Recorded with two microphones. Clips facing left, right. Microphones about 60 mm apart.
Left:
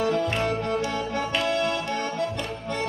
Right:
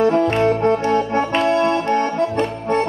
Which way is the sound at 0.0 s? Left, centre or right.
Right.